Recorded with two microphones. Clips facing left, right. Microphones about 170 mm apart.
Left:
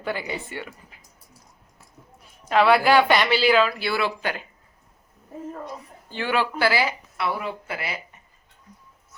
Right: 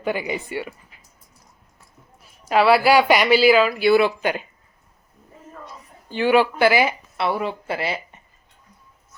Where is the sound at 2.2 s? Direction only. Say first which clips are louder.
Right 2 dB; 5° right (ahead or behind).